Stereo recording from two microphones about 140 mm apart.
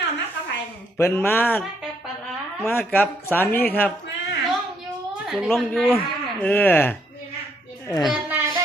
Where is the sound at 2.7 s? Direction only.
15° left (ahead or behind).